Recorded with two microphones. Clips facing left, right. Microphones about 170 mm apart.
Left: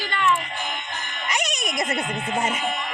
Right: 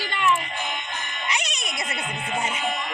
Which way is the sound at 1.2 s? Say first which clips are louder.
Left 3 dB; 45° left (ahead or behind).